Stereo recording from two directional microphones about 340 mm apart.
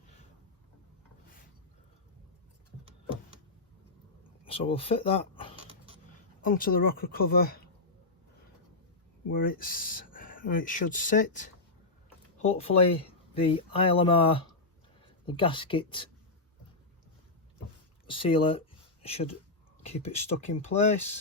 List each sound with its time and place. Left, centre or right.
4.4 s speech: centre
5.6 s vehicle: centre
6.4 s speech: left
9.3 s speech: left
12.5 s speech: centre
18.1 s speech: centre